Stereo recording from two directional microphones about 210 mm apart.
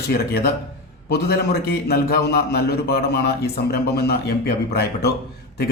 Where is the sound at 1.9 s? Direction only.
50° left (ahead or behind).